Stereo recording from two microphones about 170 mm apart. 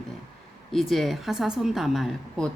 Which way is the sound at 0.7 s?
Centre (ahead or behind).